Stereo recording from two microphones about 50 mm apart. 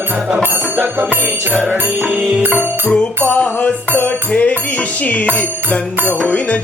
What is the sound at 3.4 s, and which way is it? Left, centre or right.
Music, left.